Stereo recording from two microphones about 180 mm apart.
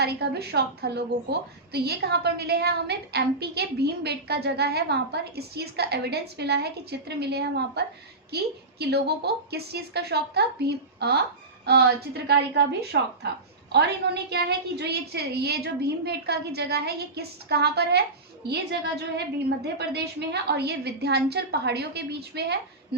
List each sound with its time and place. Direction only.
0.0 s a woman's voice: 65° right (ahead or behind)